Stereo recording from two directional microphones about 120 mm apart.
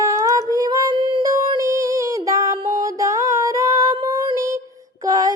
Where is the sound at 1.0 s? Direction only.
40° right (ahead or behind).